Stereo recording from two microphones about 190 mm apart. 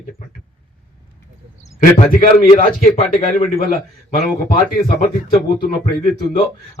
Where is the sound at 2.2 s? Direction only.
50° left (ahead or behind).